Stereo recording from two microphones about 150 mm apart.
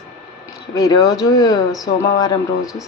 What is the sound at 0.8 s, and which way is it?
Speech, 25° left (ahead or behind).